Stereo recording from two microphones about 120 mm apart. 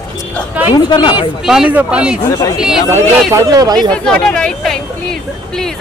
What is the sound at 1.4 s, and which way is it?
Speech, 5° right (ahead or behind).